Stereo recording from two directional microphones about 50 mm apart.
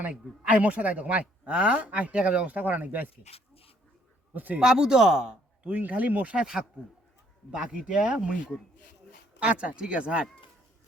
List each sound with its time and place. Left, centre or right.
0.4 s speech: right
2.6 s speech: right
4.4 s speech: right
4.6 s speech: centre
5.6 s speech: right
6.4 s speech: centre
9.4 s speech: right